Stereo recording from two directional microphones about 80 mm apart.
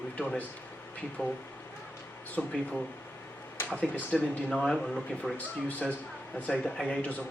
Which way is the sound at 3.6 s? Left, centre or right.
Centre.